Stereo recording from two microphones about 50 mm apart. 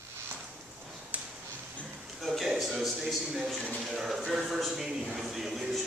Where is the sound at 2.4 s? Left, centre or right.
Centre.